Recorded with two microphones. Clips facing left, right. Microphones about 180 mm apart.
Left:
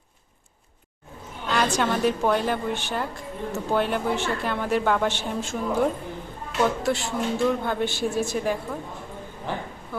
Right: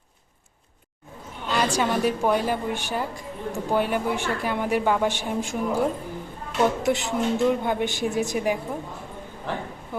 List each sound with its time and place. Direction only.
1.5 s a woman's voice: 10° right (ahead or behind)